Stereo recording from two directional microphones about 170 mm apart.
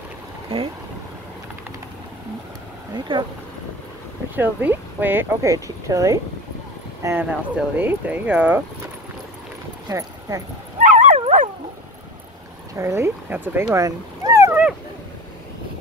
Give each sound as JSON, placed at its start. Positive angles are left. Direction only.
{"t": 0.5, "sound": "boat", "side_deg": -35}
{"t": 2.9, "sound": "a sound", "side_deg": -25}
{"t": 4.4, "sound": "speech", "side_deg": -10}
{"t": 9.8, "sound": "speech", "side_deg": -20}
{"t": 10.8, "sound": "dog", "side_deg": -45}
{"t": 12.7, "sound": "speech", "side_deg": -15}